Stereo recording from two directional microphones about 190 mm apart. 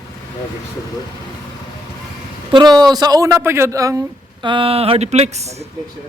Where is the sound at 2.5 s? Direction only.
25° right (ahead or behind).